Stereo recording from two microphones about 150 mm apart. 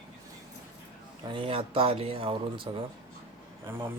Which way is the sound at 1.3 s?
35° right (ahead or behind).